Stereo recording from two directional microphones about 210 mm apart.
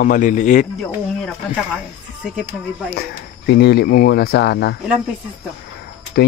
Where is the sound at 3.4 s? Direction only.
50° left (ahead or behind).